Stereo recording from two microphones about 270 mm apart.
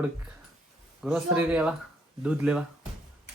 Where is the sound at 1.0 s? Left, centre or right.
Centre.